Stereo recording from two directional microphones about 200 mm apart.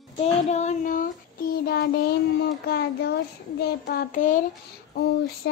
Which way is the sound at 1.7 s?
50° left (ahead or behind).